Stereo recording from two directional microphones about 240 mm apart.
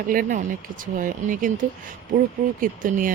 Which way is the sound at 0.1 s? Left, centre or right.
Right.